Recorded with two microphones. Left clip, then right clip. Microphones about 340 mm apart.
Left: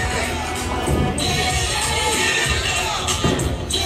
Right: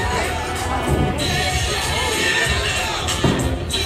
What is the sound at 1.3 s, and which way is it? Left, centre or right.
Music, centre.